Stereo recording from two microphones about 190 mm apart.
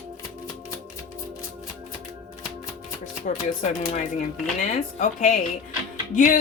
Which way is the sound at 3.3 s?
40° left (ahead or behind).